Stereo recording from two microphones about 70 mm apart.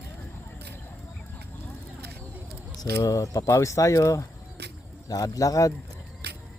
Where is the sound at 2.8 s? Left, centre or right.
Left.